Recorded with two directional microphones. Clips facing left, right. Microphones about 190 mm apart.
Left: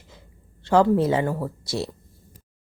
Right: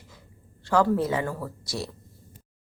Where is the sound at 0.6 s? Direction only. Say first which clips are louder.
Left 4 dB; 25° left (ahead or behind).